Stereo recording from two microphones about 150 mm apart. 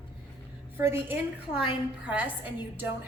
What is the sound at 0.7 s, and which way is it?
A woman's voice, 15° right (ahead or behind).